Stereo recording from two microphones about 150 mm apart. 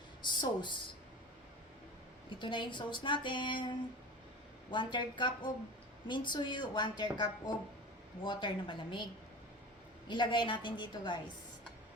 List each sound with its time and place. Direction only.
0.2 s speech: 30° left (ahead or behind)
2.4 s a woman's voice: 30° left (ahead or behind)
10.1 s a woman's voice: 30° left (ahead or behind)